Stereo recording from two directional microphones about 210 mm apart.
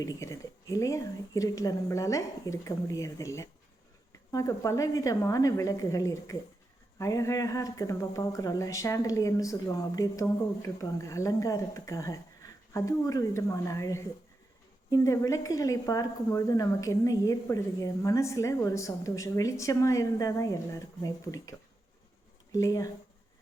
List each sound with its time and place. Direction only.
0.0 s a woman's voice: 15° left (ahead or behind)
22.5 s a woman's voice: 15° left (ahead or behind)